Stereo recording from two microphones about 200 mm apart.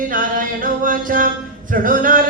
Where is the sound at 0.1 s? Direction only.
45° right (ahead or behind).